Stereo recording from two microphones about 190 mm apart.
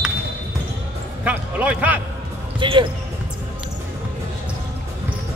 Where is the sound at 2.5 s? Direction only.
25° right (ahead or behind).